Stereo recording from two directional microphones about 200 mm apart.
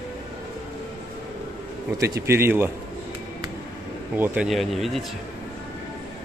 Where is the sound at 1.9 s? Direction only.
15° right (ahead or behind).